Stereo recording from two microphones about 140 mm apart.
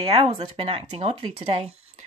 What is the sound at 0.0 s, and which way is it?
Speech, 40° right (ahead or behind).